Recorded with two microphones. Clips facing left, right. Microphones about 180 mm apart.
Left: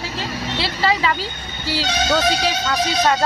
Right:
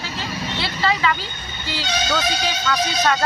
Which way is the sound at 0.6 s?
30° left (ahead or behind).